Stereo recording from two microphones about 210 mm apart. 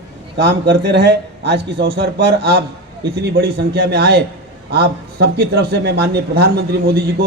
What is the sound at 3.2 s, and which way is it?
Speech, 50° right (ahead or behind).